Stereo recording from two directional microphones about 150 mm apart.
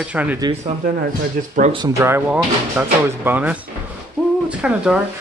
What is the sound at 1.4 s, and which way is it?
Speech, 70° right (ahead or behind).